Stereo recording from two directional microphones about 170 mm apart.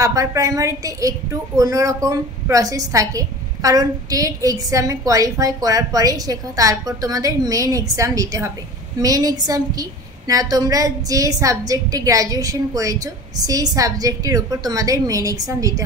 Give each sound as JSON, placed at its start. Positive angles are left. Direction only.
{"t": 0.0, "sound": "a woman's voice", "side_deg": -20}